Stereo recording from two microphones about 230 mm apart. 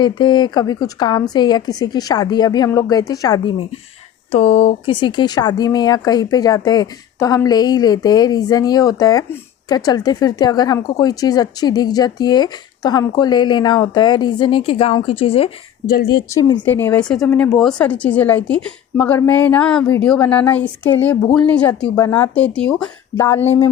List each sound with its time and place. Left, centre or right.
0.0 s speech: centre
15.9 s speech: left
16.3 s speech: centre